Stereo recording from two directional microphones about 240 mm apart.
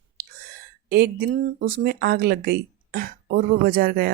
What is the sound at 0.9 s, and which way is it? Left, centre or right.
Speech, right.